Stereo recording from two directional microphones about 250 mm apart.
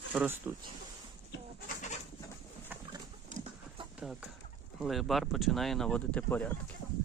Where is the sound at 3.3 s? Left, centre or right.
Right.